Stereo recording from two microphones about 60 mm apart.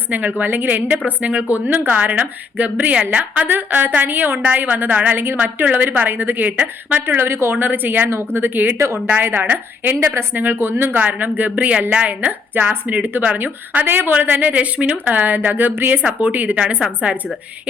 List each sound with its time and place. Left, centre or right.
0.1 s a woman's voice: right
7.0 s speech: right
7.5 s a woman's voice: right
11.0 s a woman's voice: right